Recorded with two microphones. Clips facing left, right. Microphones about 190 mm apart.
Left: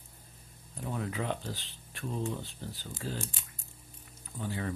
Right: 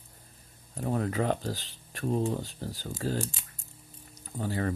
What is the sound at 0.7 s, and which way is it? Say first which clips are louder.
Speech: right 6 dB; 45° right (ahead or behind).